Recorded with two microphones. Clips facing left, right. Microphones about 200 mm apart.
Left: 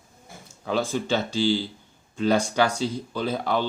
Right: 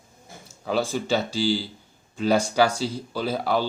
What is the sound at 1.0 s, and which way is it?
Speech, 10° right (ahead or behind).